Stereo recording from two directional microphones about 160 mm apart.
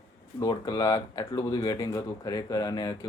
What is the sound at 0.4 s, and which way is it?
Speech, 25° left (ahead or behind).